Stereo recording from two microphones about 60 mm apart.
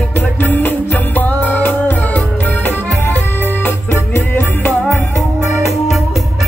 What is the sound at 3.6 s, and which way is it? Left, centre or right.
Music, left.